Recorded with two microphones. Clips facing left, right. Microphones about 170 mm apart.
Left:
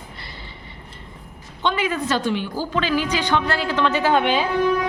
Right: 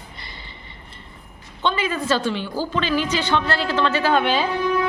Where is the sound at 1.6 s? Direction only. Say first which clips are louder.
Left 1 dB; 15° left (ahead or behind).